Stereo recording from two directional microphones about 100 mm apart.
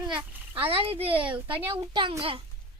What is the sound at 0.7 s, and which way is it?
Speech, 70° right (ahead or behind).